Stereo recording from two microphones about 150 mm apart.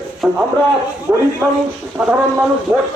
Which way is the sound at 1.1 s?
15° right (ahead or behind).